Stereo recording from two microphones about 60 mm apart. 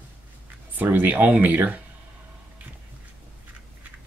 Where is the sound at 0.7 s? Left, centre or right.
Right.